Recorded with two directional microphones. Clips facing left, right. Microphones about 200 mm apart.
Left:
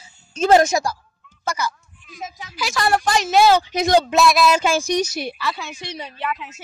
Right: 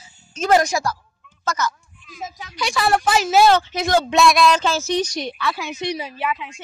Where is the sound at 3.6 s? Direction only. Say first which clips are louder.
Left 3 dB; 15° left (ahead or behind).